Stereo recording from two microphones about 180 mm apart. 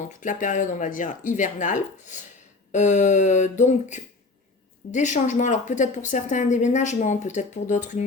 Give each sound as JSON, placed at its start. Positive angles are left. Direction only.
{"t": 0.2, "sound": "a woman's voice", "side_deg": 45}
{"t": 2.7, "sound": "a sound", "side_deg": 40}
{"t": 4.9, "sound": "a woman's voice", "side_deg": 45}